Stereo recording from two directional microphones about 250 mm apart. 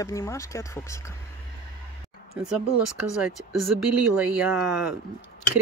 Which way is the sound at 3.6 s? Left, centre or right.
Right.